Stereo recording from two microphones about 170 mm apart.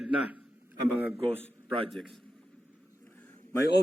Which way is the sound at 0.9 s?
10° right (ahead or behind).